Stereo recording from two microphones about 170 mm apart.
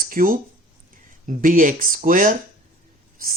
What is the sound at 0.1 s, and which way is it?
Speech, 55° right (ahead or behind).